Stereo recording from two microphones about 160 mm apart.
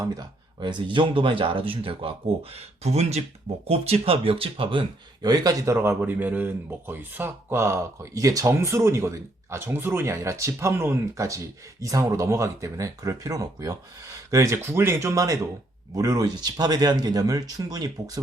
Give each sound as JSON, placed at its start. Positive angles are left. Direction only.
{"t": 0.0, "sound": "speech", "side_deg": -25}
{"t": 5.2, "sound": "speech", "side_deg": -25}